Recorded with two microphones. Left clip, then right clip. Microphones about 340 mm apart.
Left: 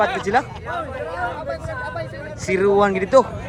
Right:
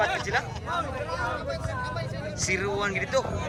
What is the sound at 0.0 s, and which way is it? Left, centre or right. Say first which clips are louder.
Speech: left 7 dB; centre.